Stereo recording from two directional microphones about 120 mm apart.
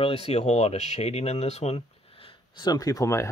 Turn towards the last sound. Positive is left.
turn(degrees=25)  # may be behind; listen again after turning